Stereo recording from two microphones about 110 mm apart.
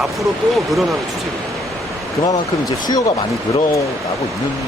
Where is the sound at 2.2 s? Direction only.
35° left (ahead or behind).